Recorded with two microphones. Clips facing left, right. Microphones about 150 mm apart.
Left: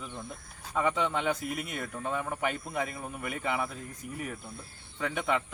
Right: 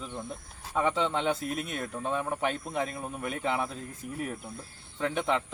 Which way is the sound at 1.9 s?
20° right (ahead or behind).